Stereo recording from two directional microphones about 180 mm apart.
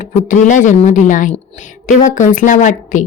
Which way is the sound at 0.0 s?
45° left (ahead or behind).